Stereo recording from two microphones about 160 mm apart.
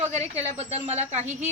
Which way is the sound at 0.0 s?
45° right (ahead or behind).